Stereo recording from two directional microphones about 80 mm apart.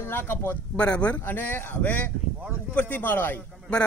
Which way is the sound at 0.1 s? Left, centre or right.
Left.